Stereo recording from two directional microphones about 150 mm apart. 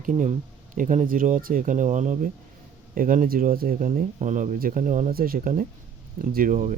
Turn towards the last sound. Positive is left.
turn(degrees=-60)  # may be behind; listen again after turning